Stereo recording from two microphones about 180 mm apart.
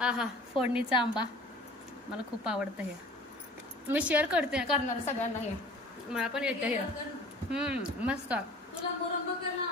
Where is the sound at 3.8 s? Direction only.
10° right (ahead or behind).